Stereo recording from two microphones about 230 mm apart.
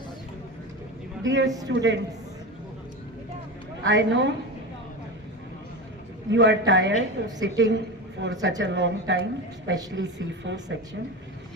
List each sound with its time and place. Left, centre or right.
1.2 s a woman's voice: right
3.8 s speech: right
6.3 s speech: right